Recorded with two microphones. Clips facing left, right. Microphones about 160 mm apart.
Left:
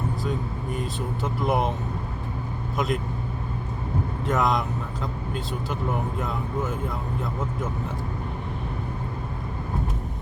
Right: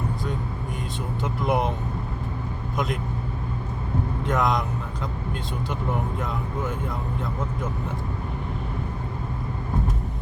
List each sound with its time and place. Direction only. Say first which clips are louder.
0.8 s speech: left 1 dB; centre (ahead or behind)
2.7 s speech: left 2 dB; centre (ahead or behind)
4.3 s speech: even; centre (ahead or behind)
6.1 s speech: left 1 dB; centre (ahead or behind)